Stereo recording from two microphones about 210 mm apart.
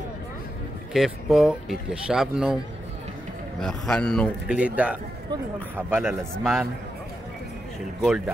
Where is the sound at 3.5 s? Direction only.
Centre (ahead or behind).